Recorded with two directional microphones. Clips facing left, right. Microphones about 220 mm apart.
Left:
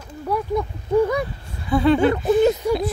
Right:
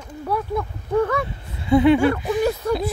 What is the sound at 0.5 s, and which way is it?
Speech, 15° left (ahead or behind).